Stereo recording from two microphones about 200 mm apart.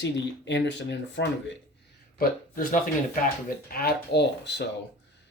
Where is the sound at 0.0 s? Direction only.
65° left (ahead or behind).